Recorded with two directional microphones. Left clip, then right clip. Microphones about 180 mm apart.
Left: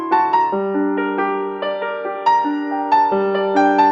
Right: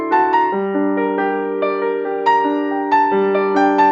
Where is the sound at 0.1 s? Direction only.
Centre (ahead or behind).